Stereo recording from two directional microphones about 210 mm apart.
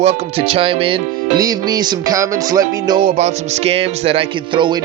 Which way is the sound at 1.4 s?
20° right (ahead or behind).